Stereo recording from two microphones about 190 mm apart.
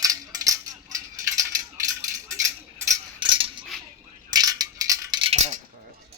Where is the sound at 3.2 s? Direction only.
25° right (ahead or behind).